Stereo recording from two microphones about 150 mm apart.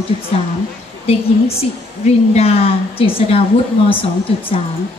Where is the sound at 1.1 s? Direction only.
40° left (ahead or behind).